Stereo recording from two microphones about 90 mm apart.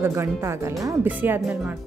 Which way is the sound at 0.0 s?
30° right (ahead or behind).